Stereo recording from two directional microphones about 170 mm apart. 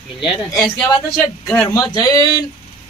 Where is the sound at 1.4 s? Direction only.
10° left (ahead or behind).